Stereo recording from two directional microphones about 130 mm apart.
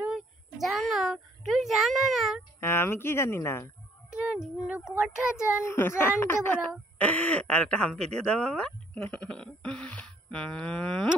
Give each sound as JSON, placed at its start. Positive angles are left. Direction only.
{"t": 0.0, "sound": "a sound", "side_deg": 0}
{"t": 2.6, "sound": "a woman's voice", "side_deg": 20}
{"t": 4.1, "sound": "child singing", "side_deg": -5}
{"t": 4.6, "sound": "speech", "side_deg": -10}
{"t": 5.4, "sound": "a woman's voice", "side_deg": 20}